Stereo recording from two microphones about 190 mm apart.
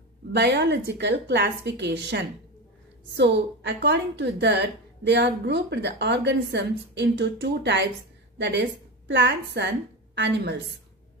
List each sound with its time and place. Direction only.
0.3 s a woman's voice: 65° right (ahead or behind)